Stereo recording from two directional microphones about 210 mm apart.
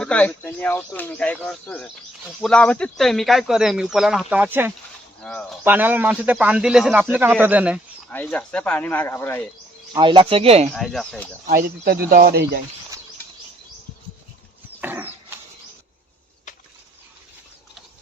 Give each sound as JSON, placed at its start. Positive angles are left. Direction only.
{"t": 0.0, "sound": "speech", "side_deg": 5}
{"t": 5.6, "sound": "a man's voice", "side_deg": -10}
{"t": 8.1, "sound": "speech", "side_deg": 5}
{"t": 9.9, "sound": "speech", "side_deg": -20}
{"t": 10.8, "sound": "speech", "side_deg": 0}
{"t": 11.4, "sound": "speech", "side_deg": -45}
{"t": 14.8, "sound": "a sound", "side_deg": -10}